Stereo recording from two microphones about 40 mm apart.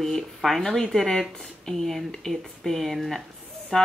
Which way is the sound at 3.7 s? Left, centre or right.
Centre.